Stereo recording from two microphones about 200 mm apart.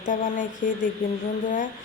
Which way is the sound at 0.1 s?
40° left (ahead or behind).